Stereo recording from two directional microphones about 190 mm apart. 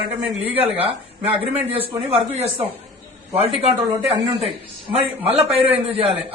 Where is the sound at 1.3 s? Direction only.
30° right (ahead or behind).